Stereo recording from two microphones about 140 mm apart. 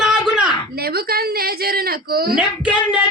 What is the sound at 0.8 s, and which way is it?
A woman's voice, 90° right.